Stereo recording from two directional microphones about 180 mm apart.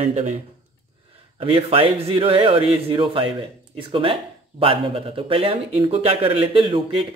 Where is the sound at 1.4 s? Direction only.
30° right (ahead or behind).